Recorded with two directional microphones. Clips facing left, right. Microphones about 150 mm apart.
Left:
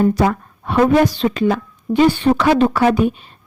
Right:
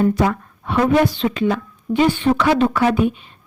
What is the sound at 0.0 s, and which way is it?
A woman's voice, 35° left (ahead or behind).